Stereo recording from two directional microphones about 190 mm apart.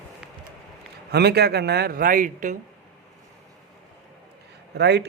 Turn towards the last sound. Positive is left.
turn(degrees=-60)  # may be behind; listen again after turning